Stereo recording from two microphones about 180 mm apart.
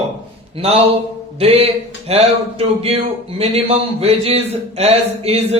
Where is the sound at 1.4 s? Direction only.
35° right (ahead or behind).